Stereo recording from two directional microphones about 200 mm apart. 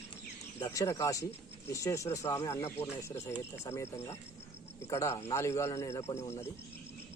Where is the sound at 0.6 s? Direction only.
15° left (ahead or behind).